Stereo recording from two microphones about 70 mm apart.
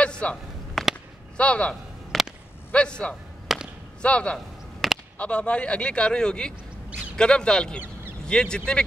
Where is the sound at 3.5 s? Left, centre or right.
Centre.